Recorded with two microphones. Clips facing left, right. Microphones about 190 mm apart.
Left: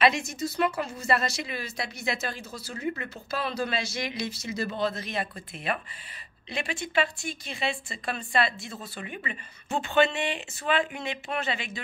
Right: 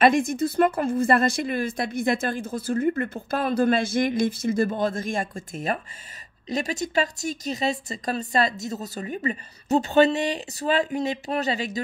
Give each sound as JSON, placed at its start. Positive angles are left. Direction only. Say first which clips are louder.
{"t": 0.0, "sound": "a woman's voice", "louder": "right 6 dB", "side_deg": -55}